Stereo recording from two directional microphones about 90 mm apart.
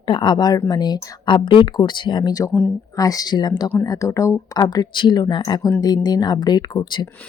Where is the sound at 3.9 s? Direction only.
40° left (ahead or behind).